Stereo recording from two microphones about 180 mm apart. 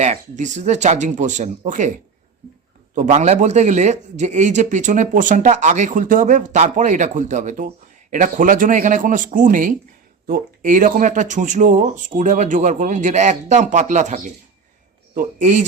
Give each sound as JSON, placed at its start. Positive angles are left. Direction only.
{"t": 0.0, "sound": "a man's voice", "side_deg": -40}